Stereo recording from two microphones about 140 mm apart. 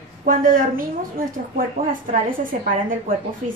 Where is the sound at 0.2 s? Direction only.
75° right (ahead or behind).